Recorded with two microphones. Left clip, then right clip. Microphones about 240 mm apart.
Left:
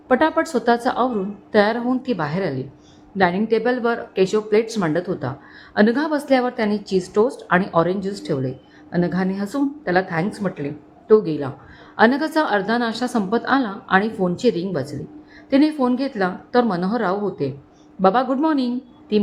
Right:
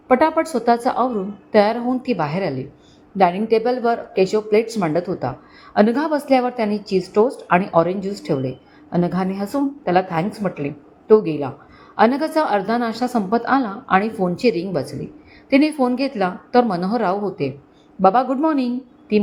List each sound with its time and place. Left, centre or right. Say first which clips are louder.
0.1 s speech: right 2 dB; centre
6.8 s a woman's voice: right 1 dB; left
7.1 s speech: right 2 dB; centre